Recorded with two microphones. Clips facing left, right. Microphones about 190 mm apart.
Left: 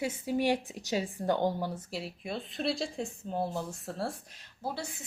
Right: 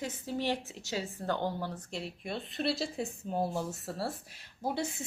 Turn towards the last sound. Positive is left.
turn(degrees=-20)  # may be behind; listen again after turning